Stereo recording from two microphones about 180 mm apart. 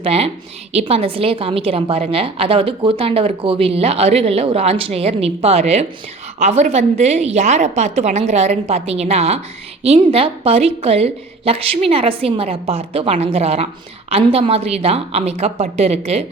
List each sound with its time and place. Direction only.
0.0 s a woman's voice: 35° right (ahead or behind)